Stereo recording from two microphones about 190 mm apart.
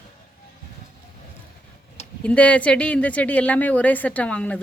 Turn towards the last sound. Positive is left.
turn(degrees=5)  # may be behind; listen again after turning